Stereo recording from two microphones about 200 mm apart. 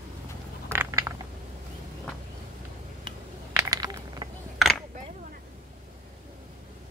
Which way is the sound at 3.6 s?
20° right (ahead or behind).